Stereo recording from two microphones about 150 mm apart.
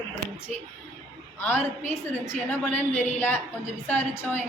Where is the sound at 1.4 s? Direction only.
15° left (ahead or behind).